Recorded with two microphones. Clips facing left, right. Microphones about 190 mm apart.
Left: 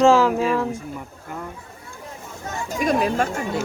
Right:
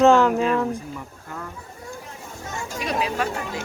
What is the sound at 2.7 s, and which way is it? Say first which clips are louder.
Speech: left 5 dB; 45° left (ahead or behind).